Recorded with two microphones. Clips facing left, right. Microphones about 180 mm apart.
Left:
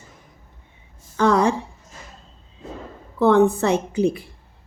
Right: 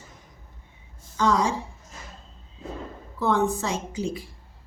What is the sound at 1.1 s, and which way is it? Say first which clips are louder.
Speech: left 5 dB; 60° left (ahead or behind).